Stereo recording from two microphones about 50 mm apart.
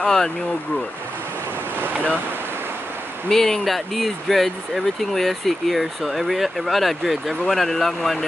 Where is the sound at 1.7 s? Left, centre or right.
Right.